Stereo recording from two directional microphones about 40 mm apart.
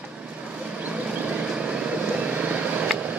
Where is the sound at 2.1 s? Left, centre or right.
Right.